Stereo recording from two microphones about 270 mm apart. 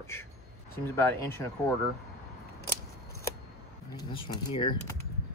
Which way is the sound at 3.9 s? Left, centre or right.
Centre.